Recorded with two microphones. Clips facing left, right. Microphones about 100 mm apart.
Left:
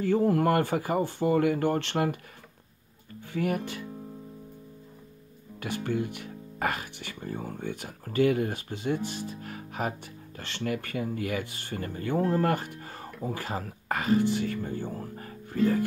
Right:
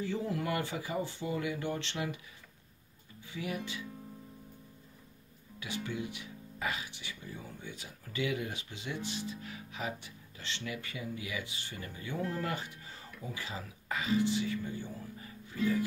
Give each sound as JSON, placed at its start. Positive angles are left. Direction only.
{"t": 0.0, "sound": "speech", "side_deg": 55}
{"t": 3.2, "sound": "speech", "side_deg": 55}
{"t": 5.6, "sound": "speech", "side_deg": 50}